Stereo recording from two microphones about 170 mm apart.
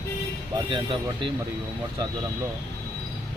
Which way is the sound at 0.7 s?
30° right (ahead or behind).